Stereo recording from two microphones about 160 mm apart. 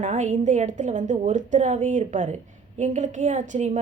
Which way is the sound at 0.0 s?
50° right (ahead or behind).